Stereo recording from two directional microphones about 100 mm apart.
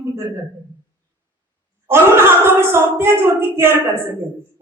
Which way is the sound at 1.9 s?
25° right (ahead or behind).